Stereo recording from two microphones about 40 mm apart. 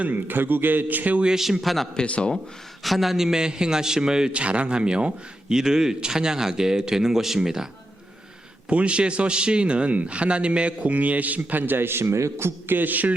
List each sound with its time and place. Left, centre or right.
0.1 s a man's voice: right
1.4 s a man's voice: centre
2.0 s speech: left
2.8 s a man's voice: centre
4.3 s a man's voice: right; by 7.7 s centre
8.7 s a man's voice: right
12.7 s a man's voice: right